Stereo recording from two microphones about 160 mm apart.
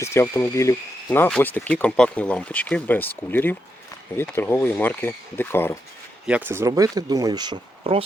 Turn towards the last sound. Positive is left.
turn(degrees=-30)  # may be behind; listen again after turning